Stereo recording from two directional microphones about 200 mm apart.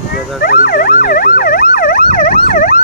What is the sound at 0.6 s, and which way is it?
Emergency vehicle, 45° left (ahead or behind).